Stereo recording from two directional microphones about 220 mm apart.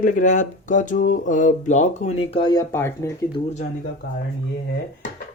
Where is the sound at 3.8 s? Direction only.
45° left (ahead or behind).